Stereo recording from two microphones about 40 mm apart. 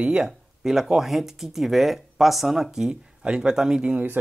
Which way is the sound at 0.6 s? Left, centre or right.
Centre.